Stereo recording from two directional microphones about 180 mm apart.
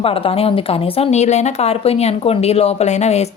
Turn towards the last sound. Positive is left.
turn(degrees=40)  # may be behind; listen again after turning